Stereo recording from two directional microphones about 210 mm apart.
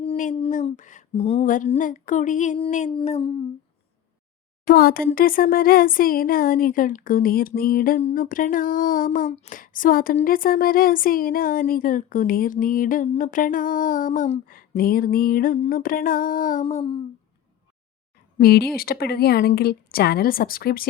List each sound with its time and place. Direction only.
0.0 s speech: 30° left (ahead or behind)
2.9 s a sound: 25° left (ahead or behind)
4.6 s speech: 45° left (ahead or behind); by 17.0 s 30° left (ahead or behind)
18.3 s speech: 45° left (ahead or behind)